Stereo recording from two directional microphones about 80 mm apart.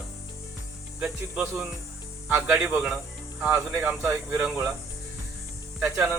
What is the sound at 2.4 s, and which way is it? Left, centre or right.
Speech, centre.